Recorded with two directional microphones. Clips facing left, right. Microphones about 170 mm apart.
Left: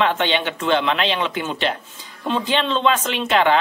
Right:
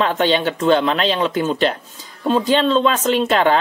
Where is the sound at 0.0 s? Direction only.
40° right (ahead or behind).